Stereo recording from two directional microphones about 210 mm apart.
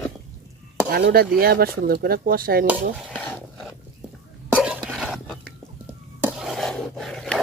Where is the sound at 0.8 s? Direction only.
45° right (ahead or behind).